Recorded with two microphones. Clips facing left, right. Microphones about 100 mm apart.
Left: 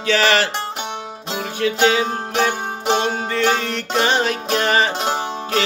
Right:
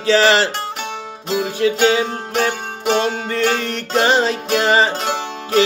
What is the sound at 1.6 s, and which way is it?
Music, 30° right (ahead or behind).